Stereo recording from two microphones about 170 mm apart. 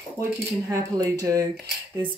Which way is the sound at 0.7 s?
20° right (ahead or behind).